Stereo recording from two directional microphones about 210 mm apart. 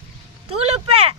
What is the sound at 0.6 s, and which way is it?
Speech, 30° right (ahead or behind).